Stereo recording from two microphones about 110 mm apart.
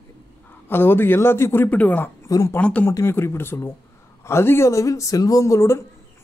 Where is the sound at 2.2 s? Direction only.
30° left (ahead or behind).